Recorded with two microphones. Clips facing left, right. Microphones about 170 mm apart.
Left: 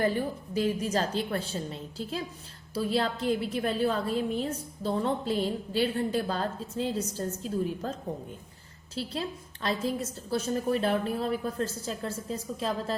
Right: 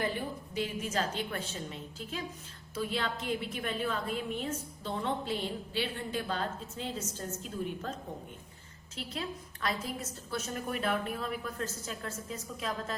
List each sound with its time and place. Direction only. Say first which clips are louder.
0.5 s a woman's voice: left 6 dB; 35° left (ahead or behind)